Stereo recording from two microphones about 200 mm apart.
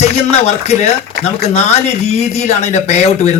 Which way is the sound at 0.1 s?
35° left (ahead or behind).